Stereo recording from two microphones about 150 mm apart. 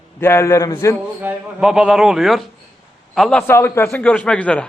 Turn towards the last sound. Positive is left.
turn(degrees=10)  # may be behind; listen again after turning